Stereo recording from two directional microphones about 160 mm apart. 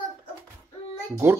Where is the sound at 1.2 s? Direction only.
15° right (ahead or behind).